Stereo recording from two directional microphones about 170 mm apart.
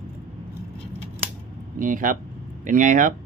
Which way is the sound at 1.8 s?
50° right (ahead or behind).